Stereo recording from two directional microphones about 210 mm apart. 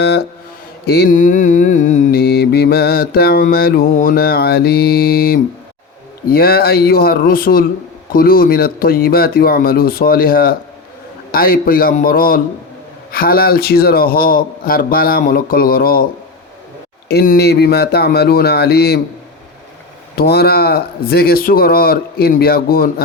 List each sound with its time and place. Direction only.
0.9 s mantra: 50° left (ahead or behind)
2.2 s mantra: 50° left (ahead or behind)
17.1 s mantra: 50° left (ahead or behind)
20.1 s mantra: 50° left (ahead or behind)